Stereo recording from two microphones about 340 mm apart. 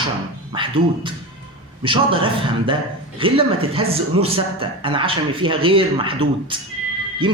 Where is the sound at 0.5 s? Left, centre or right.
Centre.